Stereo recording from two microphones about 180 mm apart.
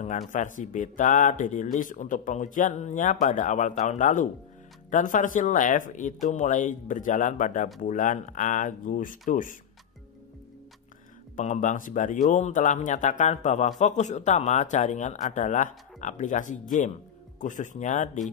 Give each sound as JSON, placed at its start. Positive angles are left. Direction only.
{"t": 0.3, "sound": "speech", "side_deg": 45}
{"t": 11.3, "sound": "speech", "side_deg": 45}